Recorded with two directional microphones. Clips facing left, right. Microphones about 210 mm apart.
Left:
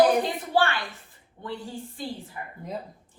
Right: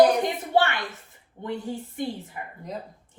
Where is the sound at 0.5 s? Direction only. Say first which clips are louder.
Right 1 dB; 25° right (ahead or behind).